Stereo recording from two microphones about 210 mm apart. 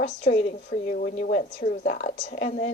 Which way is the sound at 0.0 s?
35° left (ahead or behind).